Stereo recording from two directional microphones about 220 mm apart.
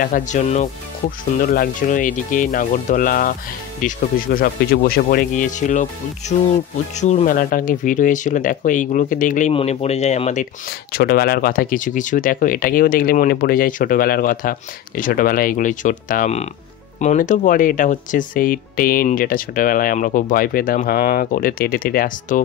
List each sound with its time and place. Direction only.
0.0 s speech: 35° left (ahead or behind)
10.9 s speech: 45° left (ahead or behind)